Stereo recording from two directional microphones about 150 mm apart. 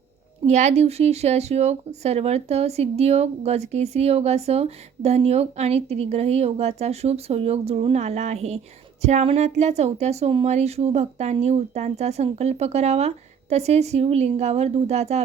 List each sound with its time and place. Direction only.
0.4 s speech: 50° right (ahead or behind)